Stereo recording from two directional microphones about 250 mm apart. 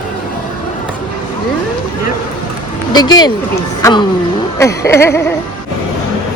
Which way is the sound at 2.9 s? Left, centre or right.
Centre.